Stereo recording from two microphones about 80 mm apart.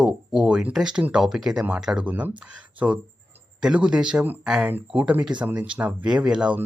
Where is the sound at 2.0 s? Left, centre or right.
Right.